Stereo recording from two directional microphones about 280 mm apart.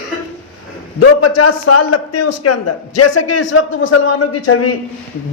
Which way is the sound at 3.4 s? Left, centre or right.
Left.